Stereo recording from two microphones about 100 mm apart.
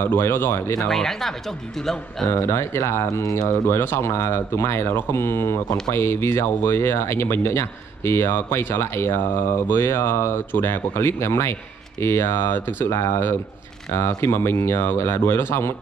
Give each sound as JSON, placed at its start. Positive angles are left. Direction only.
{"t": 0.0, "sound": "speech", "side_deg": 20}
{"t": 0.8, "sound": "speech", "side_deg": 5}
{"t": 2.4, "sound": "speech", "side_deg": 25}
{"t": 3.4, "sound": "speech", "side_deg": 25}